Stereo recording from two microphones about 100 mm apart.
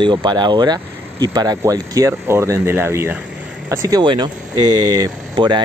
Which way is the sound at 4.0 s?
50° right (ahead or behind).